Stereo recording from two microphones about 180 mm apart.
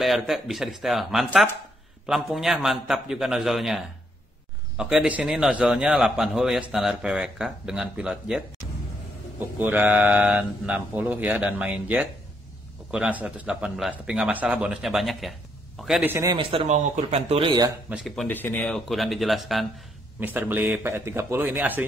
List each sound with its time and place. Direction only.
0.0 s a man's voice: centre (ahead or behind)
16.1 s speech: 15° right (ahead or behind)
16.3 s speech: 30° right (ahead or behind)
17.8 s a man's voice: centre (ahead or behind)
20.2 s speech: 10° right (ahead or behind)